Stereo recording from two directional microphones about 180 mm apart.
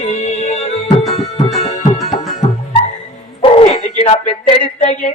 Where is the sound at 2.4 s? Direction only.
35° left (ahead or behind).